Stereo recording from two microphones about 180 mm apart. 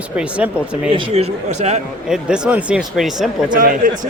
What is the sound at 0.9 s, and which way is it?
Speech, 30° right (ahead or behind).